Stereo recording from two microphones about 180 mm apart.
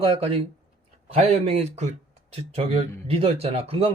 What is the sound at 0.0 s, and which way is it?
Speech, 35° right (ahead or behind).